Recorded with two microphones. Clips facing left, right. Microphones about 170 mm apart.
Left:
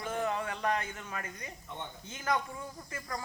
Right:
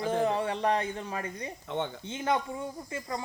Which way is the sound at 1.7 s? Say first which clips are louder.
Right 11 dB; 90° right.